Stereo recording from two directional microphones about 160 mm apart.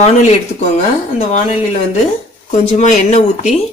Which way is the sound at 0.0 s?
40° left (ahead or behind).